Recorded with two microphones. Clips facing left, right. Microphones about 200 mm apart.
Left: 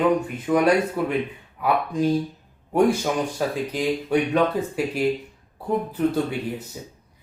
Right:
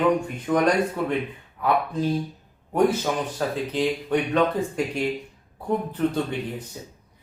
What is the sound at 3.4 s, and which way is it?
Speech, 10° left (ahead or behind).